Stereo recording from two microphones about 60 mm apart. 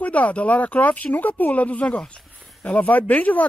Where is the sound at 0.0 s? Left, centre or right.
Left.